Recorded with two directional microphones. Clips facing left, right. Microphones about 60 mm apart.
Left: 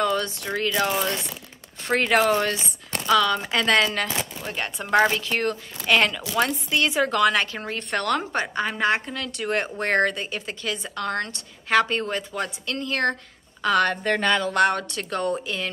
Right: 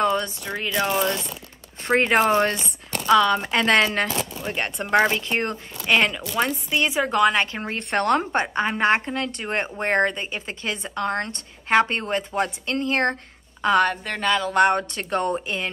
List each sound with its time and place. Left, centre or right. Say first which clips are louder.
0.0 s a sound: right 2 dB; right
0.6 s speech: left 1 dB; centre
1.9 s a woman's voice: right 1 dB; right
4.8 s speech: even; centre
5.1 s a woman's voice: even; right
13.8 s speech: left 1 dB; centre
14.5 s a woman's voice: right 2 dB; right